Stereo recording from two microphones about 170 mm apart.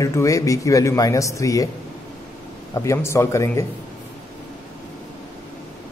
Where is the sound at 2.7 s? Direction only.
15° left (ahead or behind).